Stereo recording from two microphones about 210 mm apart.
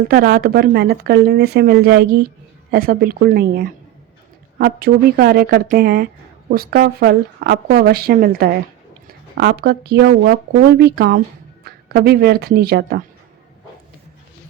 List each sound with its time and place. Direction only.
0.1 s speech: 45° right (ahead or behind)